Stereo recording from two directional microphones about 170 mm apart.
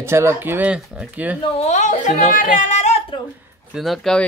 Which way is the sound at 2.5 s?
45° left (ahead or behind).